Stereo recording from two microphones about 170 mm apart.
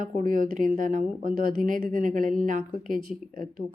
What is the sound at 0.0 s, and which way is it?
Speech, 55° right (ahead or behind).